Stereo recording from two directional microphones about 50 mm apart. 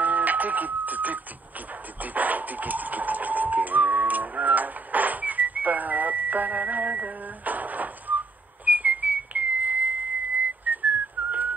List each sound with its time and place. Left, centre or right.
0.0 s a sound: right
8.6 s whistle: right
10.4 s whistling: right